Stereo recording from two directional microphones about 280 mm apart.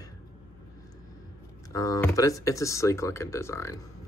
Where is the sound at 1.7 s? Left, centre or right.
Centre.